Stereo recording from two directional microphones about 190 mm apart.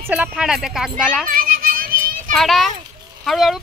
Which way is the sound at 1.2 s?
50° right (ahead or behind).